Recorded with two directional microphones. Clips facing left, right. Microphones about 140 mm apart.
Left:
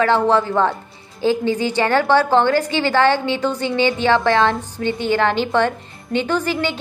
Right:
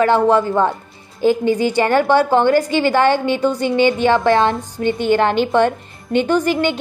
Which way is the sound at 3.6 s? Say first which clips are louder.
Right 4 dB; 50° right (ahead or behind).